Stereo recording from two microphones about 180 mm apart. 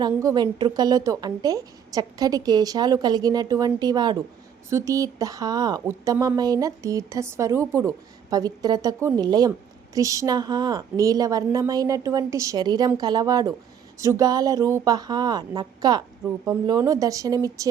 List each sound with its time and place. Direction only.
0.0 s a woman's voice: 20° right (ahead or behind)